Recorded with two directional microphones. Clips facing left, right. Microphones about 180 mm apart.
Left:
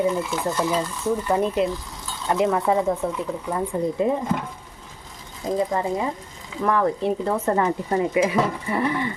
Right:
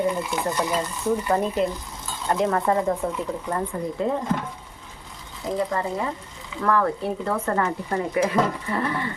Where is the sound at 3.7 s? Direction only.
20° left (ahead or behind).